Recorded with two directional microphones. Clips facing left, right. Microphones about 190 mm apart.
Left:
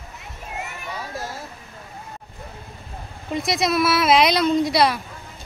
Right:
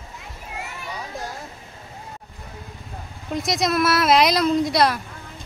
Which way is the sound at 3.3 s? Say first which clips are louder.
Left 1 dB; centre (ahead or behind).